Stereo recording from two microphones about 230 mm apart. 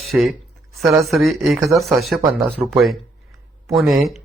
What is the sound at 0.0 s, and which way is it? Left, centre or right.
Speech, centre.